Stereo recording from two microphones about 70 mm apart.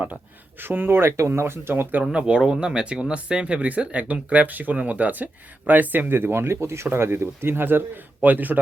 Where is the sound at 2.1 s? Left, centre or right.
Centre.